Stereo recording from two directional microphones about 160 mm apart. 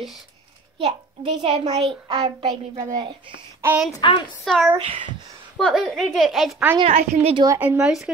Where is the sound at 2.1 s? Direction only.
30° right (ahead or behind).